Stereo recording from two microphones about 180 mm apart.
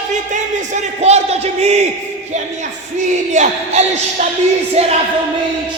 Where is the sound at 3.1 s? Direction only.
40° right (ahead or behind).